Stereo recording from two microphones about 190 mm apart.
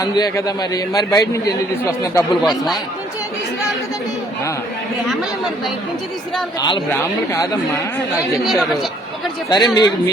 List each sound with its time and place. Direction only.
0.0 s a man's voice: 20° left (ahead or behind)
2.4 s speech: centre (ahead or behind)
6.6 s a man's voice: 25° left (ahead or behind)
8.4 s speech: centre (ahead or behind)
9.5 s a man's voice: 20° left (ahead or behind)